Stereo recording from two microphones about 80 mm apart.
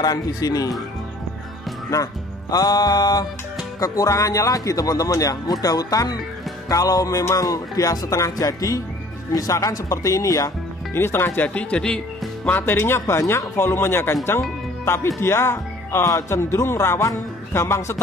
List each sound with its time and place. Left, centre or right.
0.0 s speech: left
2.5 s music: left
3.8 s speech: left
11.0 s speech: left
11.4 s speech: centre
12.4 s speech: left